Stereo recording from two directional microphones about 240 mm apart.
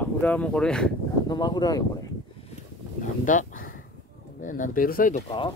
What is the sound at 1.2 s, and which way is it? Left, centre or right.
Speech, centre.